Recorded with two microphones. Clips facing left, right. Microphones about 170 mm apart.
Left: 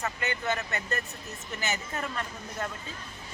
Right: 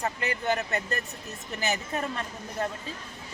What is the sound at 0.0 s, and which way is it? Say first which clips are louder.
Speech: right 2 dB; 35° right (ahead or behind).